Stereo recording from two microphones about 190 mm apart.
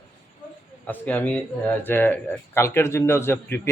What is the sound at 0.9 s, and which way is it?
Speech, 10° left (ahead or behind).